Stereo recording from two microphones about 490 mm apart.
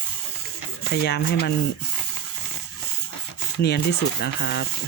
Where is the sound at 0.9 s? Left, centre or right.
Centre.